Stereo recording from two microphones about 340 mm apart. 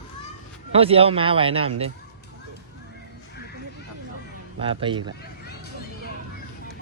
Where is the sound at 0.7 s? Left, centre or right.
Centre.